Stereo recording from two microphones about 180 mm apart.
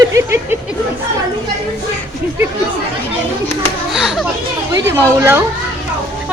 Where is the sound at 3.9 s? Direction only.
Centre (ahead or behind).